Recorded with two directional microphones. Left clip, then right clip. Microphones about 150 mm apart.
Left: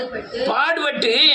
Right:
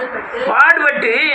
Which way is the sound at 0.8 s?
20° left (ahead or behind).